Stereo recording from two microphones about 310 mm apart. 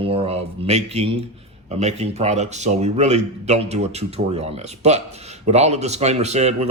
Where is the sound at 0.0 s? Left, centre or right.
Centre.